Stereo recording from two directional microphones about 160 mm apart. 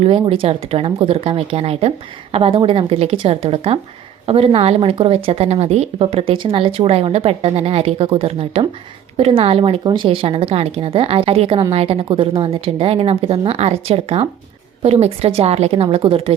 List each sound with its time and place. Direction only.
0.0 s speech: 40° right (ahead or behind)